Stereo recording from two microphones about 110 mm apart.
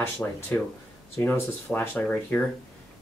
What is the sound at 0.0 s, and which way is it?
Speech, 20° left (ahead or behind).